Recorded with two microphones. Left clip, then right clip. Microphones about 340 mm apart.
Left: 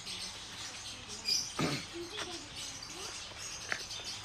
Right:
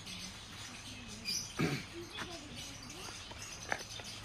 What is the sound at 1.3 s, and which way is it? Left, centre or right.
Rodents, left.